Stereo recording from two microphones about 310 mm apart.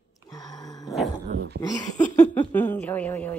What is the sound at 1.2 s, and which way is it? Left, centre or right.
Dog, right.